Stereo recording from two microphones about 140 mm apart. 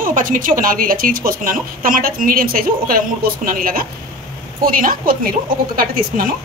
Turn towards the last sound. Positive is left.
turn(degrees=-90)